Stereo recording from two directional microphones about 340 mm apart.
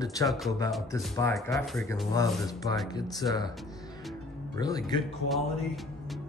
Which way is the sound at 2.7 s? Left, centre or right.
Right.